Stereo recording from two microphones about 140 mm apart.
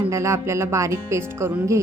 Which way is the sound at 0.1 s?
20° right (ahead or behind).